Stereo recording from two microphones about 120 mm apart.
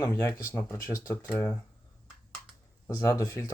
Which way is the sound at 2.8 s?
25° left (ahead or behind).